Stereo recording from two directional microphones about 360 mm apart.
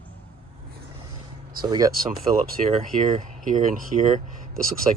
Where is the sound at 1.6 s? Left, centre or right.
Centre.